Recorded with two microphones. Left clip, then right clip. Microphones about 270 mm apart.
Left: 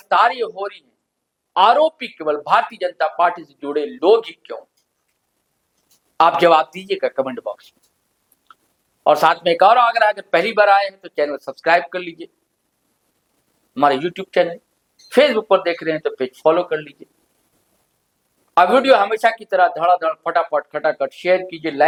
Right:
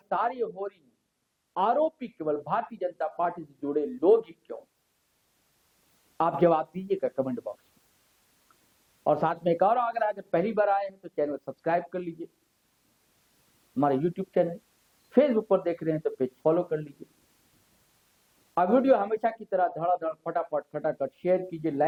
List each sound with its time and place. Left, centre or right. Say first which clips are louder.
0.0 s speech: left 13 dB; centre
6.1 s speech: left 11 dB; centre
9.0 s speech: left 11 dB; centre
11.3 s speech: left 9 dB; centre
11.6 s speech: left 12 dB; centre
13.7 s speech: left 10 dB; centre
18.5 s speech: left 10 dB; centre